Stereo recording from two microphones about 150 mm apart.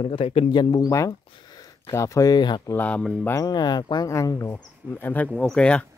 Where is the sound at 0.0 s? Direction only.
40° left (ahead or behind).